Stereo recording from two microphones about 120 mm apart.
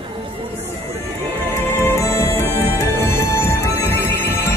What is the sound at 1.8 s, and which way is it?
Music, 25° left (ahead or behind).